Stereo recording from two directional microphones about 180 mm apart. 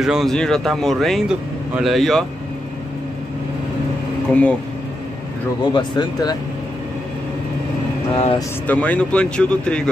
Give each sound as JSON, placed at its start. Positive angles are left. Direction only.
{"t": 0.0, "sound": "speech", "side_deg": 0}
{"t": 4.3, "sound": "speech", "side_deg": 5}
{"t": 5.6, "sound": "speech", "side_deg": 25}
{"t": 8.6, "sound": "speech", "side_deg": 10}